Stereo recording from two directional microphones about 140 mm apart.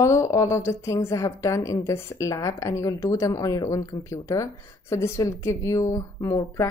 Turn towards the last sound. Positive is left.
turn(degrees=25)  # may be behind; listen again after turning